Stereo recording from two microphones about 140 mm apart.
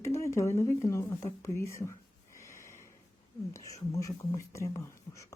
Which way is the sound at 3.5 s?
25° left (ahead or behind).